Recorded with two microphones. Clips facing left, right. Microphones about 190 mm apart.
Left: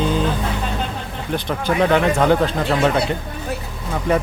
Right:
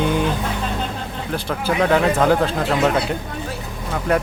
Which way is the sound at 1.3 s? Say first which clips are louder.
Left 2 dB; centre (ahead or behind).